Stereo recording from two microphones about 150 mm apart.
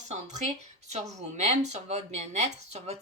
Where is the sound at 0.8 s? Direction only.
50° right (ahead or behind).